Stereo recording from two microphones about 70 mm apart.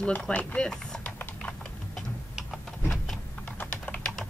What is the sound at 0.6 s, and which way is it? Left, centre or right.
Speech, centre.